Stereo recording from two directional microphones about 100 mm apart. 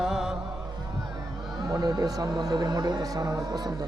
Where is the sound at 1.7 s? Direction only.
40° right (ahead or behind).